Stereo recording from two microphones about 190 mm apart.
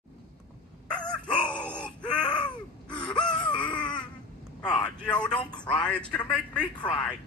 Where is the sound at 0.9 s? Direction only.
5° left (ahead or behind).